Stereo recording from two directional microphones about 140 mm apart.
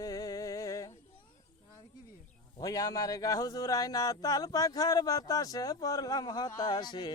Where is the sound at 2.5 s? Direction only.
25° left (ahead or behind).